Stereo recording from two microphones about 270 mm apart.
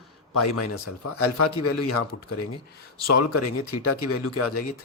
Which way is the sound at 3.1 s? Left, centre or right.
Left.